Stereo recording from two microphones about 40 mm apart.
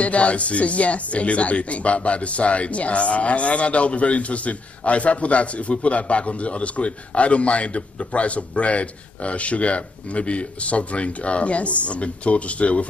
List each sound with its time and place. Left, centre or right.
0.0 s speech: left